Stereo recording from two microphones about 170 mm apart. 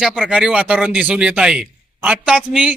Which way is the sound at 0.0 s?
5° right (ahead or behind).